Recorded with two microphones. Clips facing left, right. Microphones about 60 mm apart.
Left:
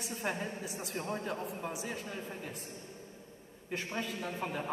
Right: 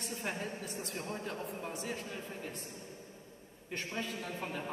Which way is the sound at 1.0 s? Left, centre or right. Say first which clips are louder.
Left 5 dB; left.